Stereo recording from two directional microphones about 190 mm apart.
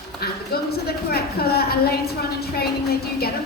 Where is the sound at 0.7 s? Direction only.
55° left (ahead or behind).